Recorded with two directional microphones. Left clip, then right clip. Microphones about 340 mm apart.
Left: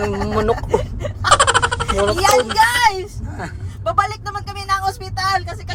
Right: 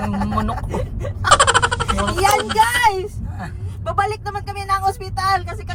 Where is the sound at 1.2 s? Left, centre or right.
Centre.